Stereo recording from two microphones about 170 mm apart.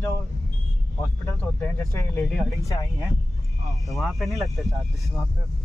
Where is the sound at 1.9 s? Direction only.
15° left (ahead or behind).